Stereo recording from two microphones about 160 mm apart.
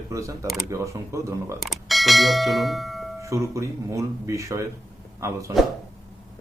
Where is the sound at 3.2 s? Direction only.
20° right (ahead or behind).